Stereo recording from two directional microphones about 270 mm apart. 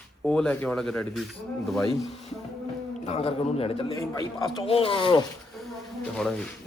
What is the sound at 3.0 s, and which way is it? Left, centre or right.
Speech, left.